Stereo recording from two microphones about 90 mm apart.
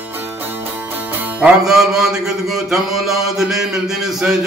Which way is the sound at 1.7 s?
5° right (ahead or behind).